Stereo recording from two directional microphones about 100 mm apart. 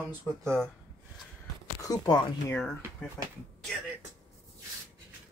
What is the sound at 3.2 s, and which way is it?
Speech, centre (ahead or behind).